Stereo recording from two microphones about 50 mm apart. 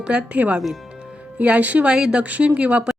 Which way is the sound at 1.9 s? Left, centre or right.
Centre.